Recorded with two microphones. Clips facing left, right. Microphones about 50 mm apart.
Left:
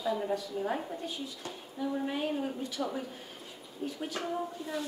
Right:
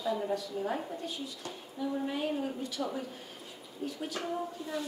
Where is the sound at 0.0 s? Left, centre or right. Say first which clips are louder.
Even; left.